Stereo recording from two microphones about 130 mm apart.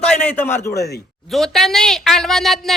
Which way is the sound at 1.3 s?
Centre (ahead or behind).